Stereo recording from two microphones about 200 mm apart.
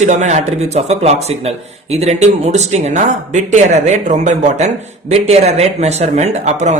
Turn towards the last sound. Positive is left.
turn(degrees=-35)  # may be behind; listen again after turning